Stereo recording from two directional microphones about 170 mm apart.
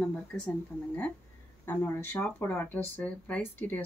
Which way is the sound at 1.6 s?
10° left (ahead or behind).